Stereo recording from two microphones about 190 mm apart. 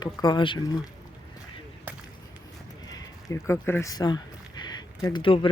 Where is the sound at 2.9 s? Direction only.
15° left (ahead or behind).